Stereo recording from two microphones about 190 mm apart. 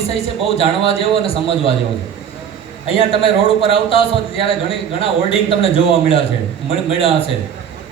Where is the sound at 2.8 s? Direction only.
30° left (ahead or behind).